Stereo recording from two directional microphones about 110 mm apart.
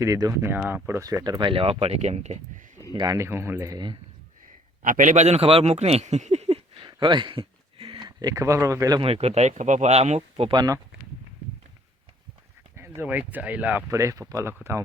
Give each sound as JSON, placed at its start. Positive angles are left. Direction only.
{"t": 0.0, "sound": "speech", "side_deg": -30}
{"t": 1.0, "sound": "speech", "side_deg": -35}
{"t": 2.9, "sound": "speech", "side_deg": -45}
{"t": 3.2, "sound": "speech", "side_deg": -20}
{"t": 5.1, "sound": "speech", "side_deg": -90}
{"t": 6.7, "sound": "a sound", "side_deg": -45}
{"t": 7.9, "sound": "speech", "side_deg": -35}
{"t": 9.0, "sound": "speech", "side_deg": -65}
{"t": 10.5, "sound": "speech", "side_deg": -40}
{"t": 12.7, "sound": "speech", "side_deg": -20}
{"t": 13.9, "sound": "speech", "side_deg": -30}